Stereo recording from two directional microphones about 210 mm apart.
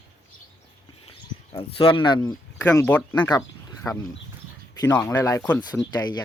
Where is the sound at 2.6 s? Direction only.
10° left (ahead or behind).